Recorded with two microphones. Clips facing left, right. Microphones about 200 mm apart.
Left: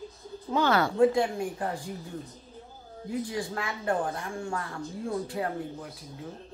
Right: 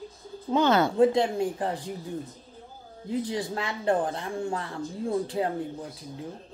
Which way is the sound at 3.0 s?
25° right (ahead or behind).